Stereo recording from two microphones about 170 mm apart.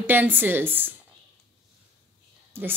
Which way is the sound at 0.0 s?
10° right (ahead or behind).